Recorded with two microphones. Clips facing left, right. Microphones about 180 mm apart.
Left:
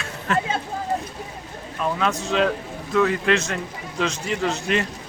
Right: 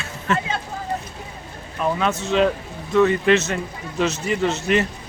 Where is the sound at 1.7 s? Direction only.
5° right (ahead or behind).